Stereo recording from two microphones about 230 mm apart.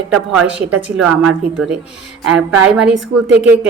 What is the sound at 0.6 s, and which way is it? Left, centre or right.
Speech, centre.